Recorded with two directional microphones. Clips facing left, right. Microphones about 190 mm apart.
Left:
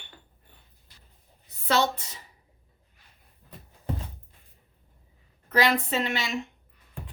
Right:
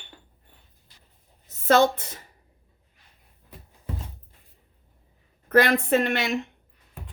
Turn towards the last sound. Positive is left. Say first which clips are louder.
# right 6 dB
turn(degrees=-55)  # may be behind; listen again after turning